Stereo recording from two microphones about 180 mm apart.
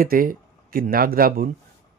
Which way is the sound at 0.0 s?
55° right (ahead or behind).